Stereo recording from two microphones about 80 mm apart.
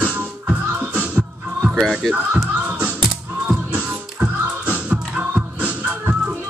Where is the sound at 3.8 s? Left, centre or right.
Centre.